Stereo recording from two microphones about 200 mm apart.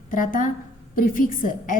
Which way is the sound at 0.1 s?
40° left (ahead or behind).